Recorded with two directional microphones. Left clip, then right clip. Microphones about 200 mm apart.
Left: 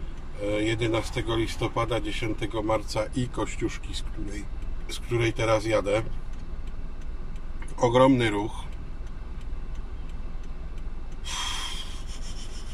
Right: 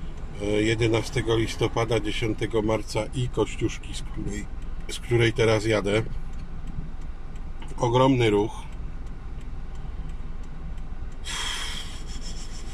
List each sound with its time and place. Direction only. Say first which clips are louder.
0.4 s speech: right 3 dB; 15° right (ahead or behind)
7.8 s speech: left 1 dB; 10° right (ahead or behind)
11.2 s snort: right 1 dB; 15° right (ahead or behind)